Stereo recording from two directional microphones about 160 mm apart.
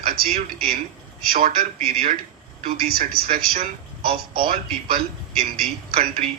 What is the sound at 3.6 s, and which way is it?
Speech, 35° right (ahead or behind).